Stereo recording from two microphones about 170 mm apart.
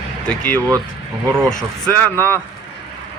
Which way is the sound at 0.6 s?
20° right (ahead or behind).